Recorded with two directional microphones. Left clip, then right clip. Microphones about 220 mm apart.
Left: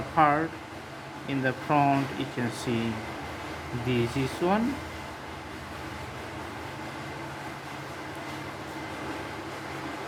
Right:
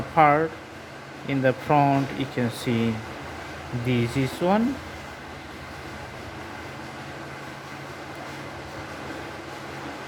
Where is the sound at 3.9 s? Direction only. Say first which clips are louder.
Right 3 dB; 25° right (ahead or behind).